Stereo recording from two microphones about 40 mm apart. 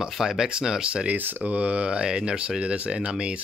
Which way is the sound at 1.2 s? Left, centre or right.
Right.